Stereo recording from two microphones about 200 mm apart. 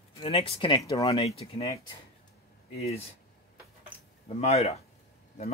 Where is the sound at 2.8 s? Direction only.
30° left (ahead or behind).